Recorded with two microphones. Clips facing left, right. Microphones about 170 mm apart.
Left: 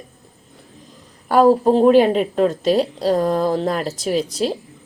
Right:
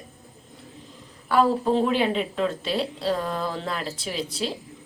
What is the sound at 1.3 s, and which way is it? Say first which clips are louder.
A woman's voice: left 7 dB; 45° left (ahead or behind).